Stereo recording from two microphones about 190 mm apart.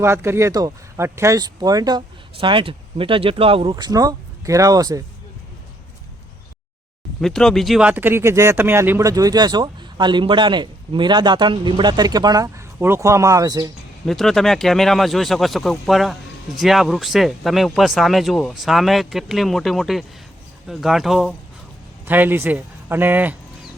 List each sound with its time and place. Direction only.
0.0 s speech: 15° right (ahead or behind)
7.2 s speech: centre (ahead or behind); by 13.7 s 20° right (ahead or behind)
14.1 s speech: centre (ahead or behind)